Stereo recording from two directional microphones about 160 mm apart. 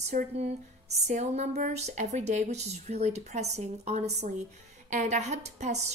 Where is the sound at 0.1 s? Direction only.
45° right (ahead or behind).